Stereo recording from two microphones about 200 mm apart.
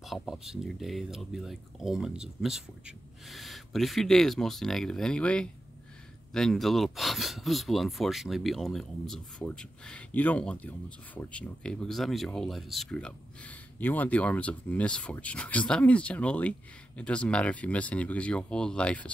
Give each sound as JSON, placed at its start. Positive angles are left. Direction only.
{"t": 0.0, "sound": "speech", "side_deg": 0}